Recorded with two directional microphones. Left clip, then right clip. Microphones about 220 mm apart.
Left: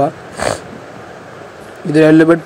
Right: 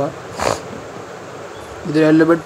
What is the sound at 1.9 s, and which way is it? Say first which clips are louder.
Speech: left 4 dB; 15° left (ahead or behind).